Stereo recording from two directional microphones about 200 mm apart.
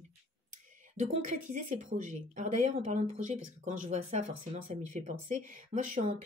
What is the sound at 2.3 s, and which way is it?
Speech, 35° right (ahead or behind).